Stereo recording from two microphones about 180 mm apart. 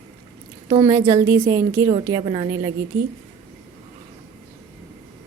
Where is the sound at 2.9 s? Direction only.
60° right (ahead or behind).